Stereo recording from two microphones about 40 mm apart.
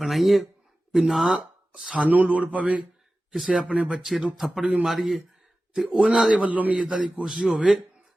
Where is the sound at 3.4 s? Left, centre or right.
Right.